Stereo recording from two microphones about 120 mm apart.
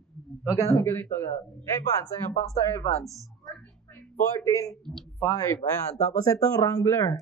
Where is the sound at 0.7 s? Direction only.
20° left (ahead or behind).